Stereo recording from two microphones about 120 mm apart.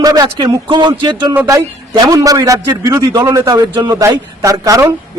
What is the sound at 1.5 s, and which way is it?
A man's voice, 30° right (ahead or behind).